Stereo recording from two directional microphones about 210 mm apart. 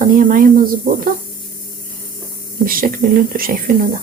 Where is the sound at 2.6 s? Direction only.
40° right (ahead or behind).